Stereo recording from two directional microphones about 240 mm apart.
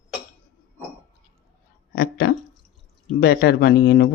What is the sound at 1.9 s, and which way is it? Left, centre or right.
Speech, left.